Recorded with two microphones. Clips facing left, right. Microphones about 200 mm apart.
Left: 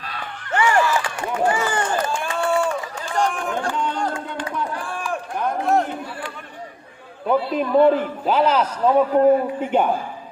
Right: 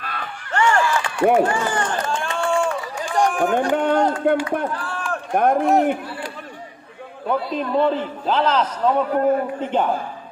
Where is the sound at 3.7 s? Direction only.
55° right (ahead or behind).